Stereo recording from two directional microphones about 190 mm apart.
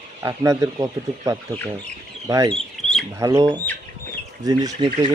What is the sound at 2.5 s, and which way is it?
Bird, centre (ahead or behind).